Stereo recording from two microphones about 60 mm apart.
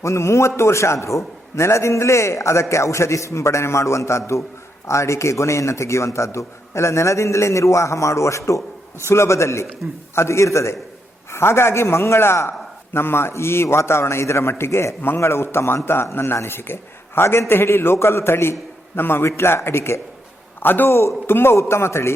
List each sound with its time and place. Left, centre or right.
0.0 s a man's voice: left
20.6 s a man's voice: left